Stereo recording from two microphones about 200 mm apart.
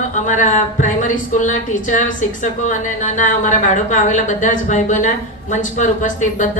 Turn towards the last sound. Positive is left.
turn(degrees=40)  # may be behind; listen again after turning